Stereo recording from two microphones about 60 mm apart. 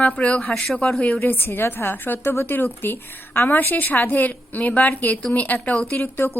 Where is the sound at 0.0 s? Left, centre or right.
Left.